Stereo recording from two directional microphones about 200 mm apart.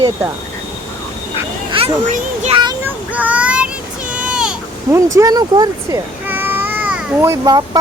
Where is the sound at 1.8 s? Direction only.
25° right (ahead or behind).